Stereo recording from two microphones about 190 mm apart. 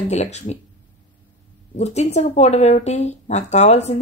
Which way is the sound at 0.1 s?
35° left (ahead or behind).